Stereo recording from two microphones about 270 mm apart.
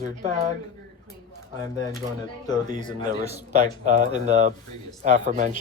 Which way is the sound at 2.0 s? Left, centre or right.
Right.